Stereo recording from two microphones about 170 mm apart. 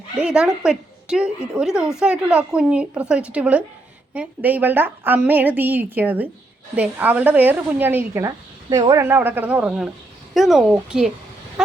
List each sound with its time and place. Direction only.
0.2 s a woman's voice: 5° right (ahead or behind)